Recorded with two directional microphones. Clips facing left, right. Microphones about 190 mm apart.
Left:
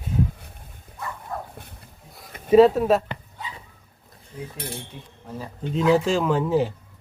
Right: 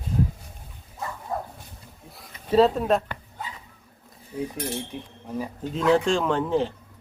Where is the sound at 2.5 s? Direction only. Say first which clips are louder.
Left 4 dB; 10° left (ahead or behind).